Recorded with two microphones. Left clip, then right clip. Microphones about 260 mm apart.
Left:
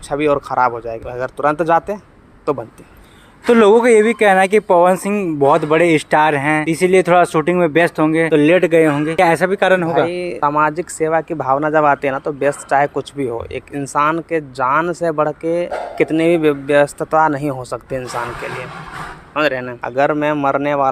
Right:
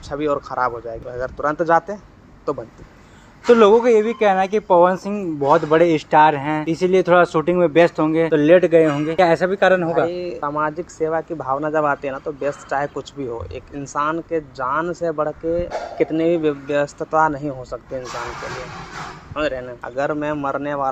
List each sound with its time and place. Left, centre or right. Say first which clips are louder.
0.1 s speech: left 6 dB; left
19.3 s speech: left 6 dB; left